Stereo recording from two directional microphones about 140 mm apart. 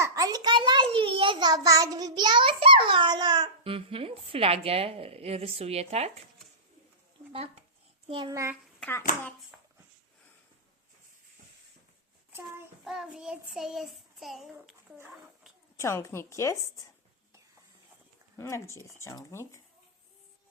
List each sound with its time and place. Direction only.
0.0 s a child's voice: 25° right (ahead or behind); by 6.1 s 50° right (ahead or behind)
8.0 s a child's voice: 40° right (ahead or behind)
8.3 s a child's voice: 20° right (ahead or behind)
8.8 s a child's voice: 15° left (ahead or behind)
9.5 s dog: 5° right (ahead or behind)
12.8 s child singing: centre (ahead or behind)
15.8 s speech: 20° left (ahead or behind)
18.3 s speech: 20° left (ahead or behind)